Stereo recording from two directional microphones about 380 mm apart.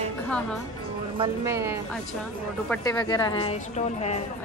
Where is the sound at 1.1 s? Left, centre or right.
Centre.